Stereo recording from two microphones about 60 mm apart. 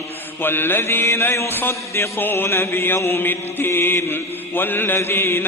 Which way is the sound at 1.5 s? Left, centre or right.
Left.